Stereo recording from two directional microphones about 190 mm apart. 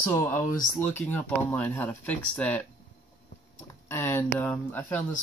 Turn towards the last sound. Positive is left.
turn(degrees=10)  # may be behind; listen again after turning